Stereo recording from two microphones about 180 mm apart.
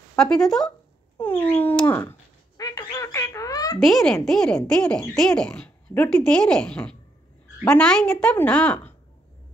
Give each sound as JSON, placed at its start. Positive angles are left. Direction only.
{"t": 0.2, "sound": "speech", "side_deg": 5}
{"t": 3.8, "sound": "speech", "side_deg": 0}